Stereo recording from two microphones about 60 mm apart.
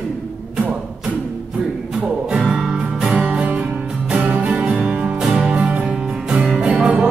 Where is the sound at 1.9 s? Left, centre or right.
Centre.